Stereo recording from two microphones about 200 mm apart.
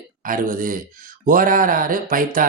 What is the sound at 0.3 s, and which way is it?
Speech, 45° right (ahead or behind).